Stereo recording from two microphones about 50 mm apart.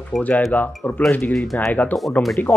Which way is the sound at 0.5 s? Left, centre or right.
Left.